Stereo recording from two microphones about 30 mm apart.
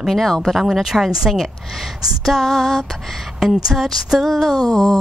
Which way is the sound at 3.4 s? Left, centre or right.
Centre.